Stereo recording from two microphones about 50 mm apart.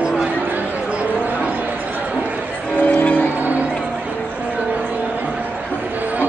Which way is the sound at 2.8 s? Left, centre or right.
Left.